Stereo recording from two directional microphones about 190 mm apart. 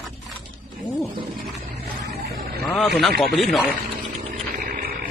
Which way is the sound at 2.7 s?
Centre (ahead or behind).